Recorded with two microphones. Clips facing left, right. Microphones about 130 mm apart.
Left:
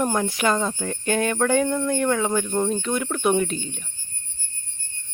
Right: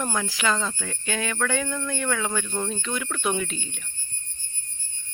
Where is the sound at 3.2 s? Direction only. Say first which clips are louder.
Left 7 dB; 45° left (ahead or behind).